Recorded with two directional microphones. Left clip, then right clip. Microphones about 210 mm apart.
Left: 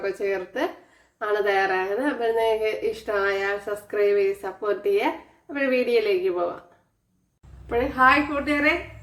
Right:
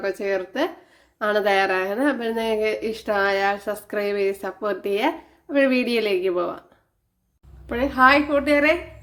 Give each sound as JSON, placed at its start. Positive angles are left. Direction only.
{"t": 0.0, "sound": "speech", "side_deg": -40}
{"t": 7.7, "sound": "speech", "side_deg": -45}